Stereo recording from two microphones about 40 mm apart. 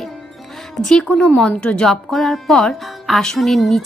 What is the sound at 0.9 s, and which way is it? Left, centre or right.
Speech, left.